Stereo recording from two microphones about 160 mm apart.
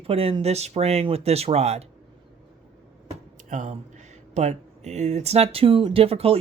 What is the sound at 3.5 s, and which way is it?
Speech, 50° right (ahead or behind).